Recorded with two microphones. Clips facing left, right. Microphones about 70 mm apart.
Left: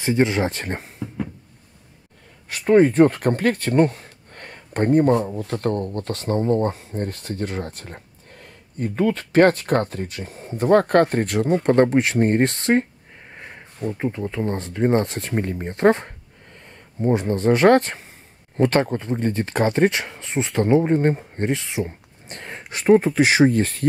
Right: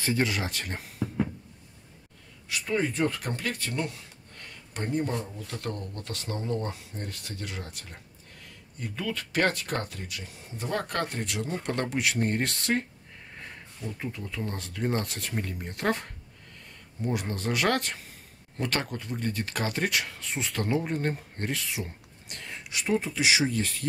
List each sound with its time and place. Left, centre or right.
0.0 s speech: left
2.5 s speech: left